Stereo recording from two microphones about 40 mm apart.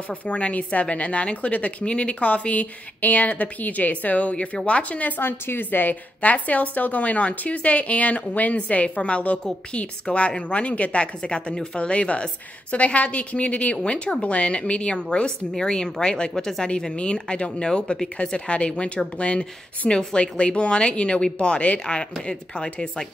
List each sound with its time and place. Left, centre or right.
0.1 s a woman's voice: left
5.2 s a woman's voice: left
19.8 s speech: centre
20.2 s speech: left